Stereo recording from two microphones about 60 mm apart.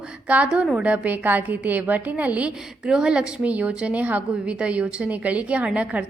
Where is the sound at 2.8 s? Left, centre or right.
Centre.